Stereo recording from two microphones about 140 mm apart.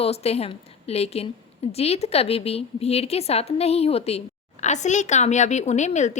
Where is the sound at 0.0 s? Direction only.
45° left (ahead or behind).